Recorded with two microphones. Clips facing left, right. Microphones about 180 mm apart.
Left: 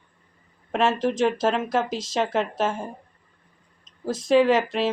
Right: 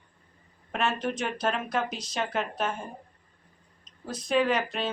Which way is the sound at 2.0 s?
90° left.